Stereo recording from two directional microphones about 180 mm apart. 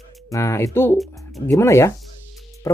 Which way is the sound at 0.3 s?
15° left (ahead or behind).